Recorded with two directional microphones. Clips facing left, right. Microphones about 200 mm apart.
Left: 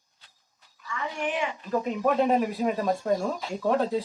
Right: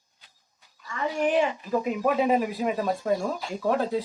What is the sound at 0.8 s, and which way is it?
Speech, 40° right (ahead or behind).